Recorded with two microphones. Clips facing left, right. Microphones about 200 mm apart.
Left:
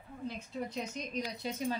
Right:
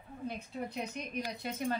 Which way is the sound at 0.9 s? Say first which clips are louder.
Even; 55° right (ahead or behind).